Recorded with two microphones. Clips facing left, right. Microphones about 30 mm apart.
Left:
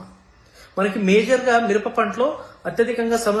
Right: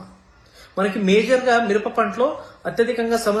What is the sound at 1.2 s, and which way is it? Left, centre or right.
Speech, right.